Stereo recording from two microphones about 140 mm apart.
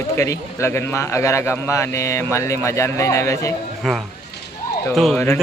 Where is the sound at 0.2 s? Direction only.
20° left (ahead or behind).